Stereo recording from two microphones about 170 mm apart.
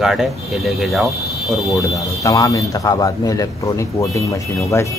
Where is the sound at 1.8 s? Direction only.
20° left (ahead or behind).